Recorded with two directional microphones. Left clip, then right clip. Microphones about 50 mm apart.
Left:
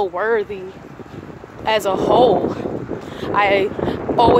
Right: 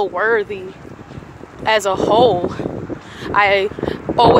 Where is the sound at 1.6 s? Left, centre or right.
Left.